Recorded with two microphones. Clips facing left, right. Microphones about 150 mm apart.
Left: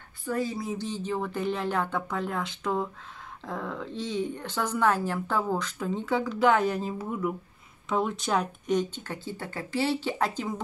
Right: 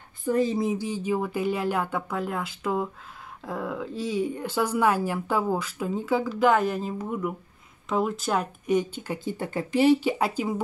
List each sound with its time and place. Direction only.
0.2 s speech: 20° right (ahead or behind)
0.7 s speech: 10° right (ahead or behind)